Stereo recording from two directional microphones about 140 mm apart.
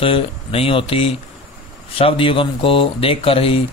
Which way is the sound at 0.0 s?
40° left (ahead or behind).